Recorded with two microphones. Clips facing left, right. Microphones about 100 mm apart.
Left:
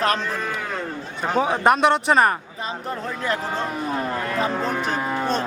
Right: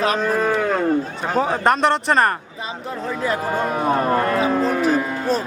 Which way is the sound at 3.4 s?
50° right (ahead or behind).